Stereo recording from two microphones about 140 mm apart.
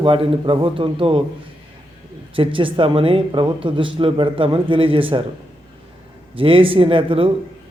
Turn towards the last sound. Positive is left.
turn(degrees=-40)  # may be behind; listen again after turning